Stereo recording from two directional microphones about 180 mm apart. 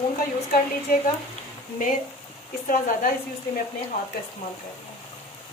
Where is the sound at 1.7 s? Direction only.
45° left (ahead or behind).